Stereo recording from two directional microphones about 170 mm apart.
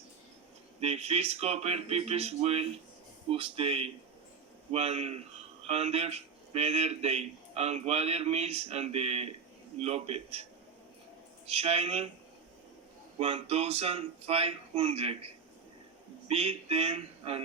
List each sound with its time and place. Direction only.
0.8 s speech: 35° right (ahead or behind)
11.4 s speech: 35° right (ahead or behind)
13.1 s speech: 35° right (ahead or behind)
16.3 s speech: 35° right (ahead or behind)